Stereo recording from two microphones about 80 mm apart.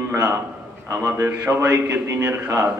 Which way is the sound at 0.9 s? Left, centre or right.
Right.